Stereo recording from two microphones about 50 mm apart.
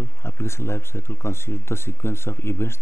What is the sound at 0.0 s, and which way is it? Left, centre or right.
Speech, left.